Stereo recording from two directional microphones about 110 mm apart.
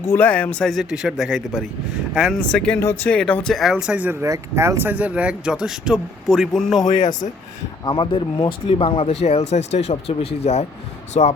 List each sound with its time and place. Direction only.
0.1 s speech: 15° left (ahead or behind); by 2.4 s 5° right (ahead or behind)
2.4 s speech: 10° left (ahead or behind)
2.8 s speech: 20° left (ahead or behind)
3.1 s speech: 10° left (ahead or behind)
3.5 s speech: 5° right (ahead or behind)
4.2 s speech: 25° right (ahead or behind); by 6.8 s centre (ahead or behind)
7.9 s speech: 45° left (ahead or behind); by 10.7 s 75° left (ahead or behind)
11.1 s speech: 90° left